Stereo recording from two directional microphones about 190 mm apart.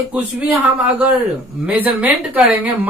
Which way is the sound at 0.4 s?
5° right (ahead or behind).